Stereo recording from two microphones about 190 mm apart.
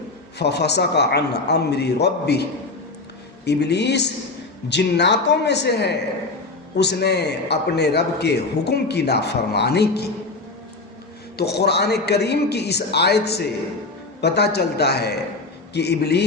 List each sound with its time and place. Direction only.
0.3 s a man's voice: 60° left (ahead or behind)
11.3 s a man's voice: 60° left (ahead or behind)